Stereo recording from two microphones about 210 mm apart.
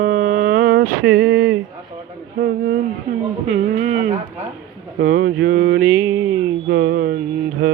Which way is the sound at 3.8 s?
35° right (ahead or behind).